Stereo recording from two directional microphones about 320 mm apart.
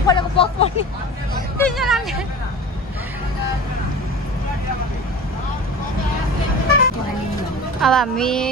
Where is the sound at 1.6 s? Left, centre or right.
Centre.